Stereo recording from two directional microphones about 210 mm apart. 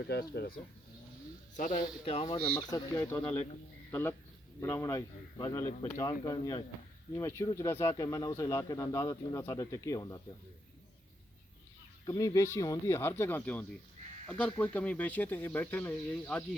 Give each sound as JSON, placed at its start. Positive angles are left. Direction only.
{"t": 0.1, "sound": "speech", "side_deg": 45}
{"t": 2.0, "sound": "speech", "side_deg": 25}
{"t": 4.6, "sound": "speech", "side_deg": 15}
{"t": 12.0, "sound": "speech", "side_deg": 15}